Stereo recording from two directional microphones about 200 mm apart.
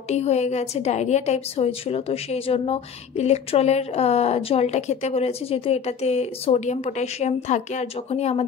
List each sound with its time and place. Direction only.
0.1 s a woman's voice: 35° left (ahead or behind)